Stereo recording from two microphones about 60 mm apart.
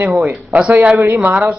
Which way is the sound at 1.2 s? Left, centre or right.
Right.